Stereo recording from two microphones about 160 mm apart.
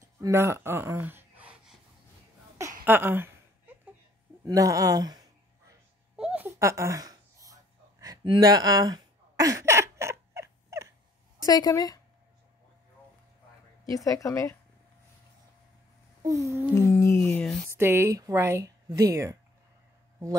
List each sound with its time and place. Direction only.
0.2 s a sound: 15° right (ahead or behind)
2.8 s a sound: 15° right (ahead or behind)
4.5 s speech: 20° right (ahead or behind)
6.1 s a sound: 5° right (ahead or behind)
11.4 s a woman's voice: 25° left (ahead or behind)
13.8 s a woman's voice: 20° left (ahead or behind)
16.3 s speech: 20° right (ahead or behind)
17.0 s speech: 15° left (ahead or behind)
17.6 s speech: 15° right (ahead or behind)